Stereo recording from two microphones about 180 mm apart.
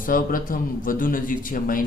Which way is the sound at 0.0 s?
50° left (ahead or behind).